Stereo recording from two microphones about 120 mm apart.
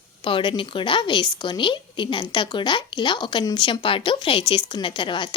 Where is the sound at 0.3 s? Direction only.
45° left (ahead or behind).